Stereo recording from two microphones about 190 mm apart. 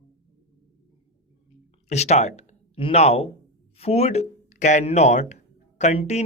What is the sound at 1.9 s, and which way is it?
Speech, 35° left (ahead or behind).